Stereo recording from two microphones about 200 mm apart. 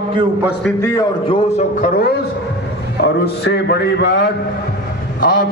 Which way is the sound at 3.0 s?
60° left (ahead or behind).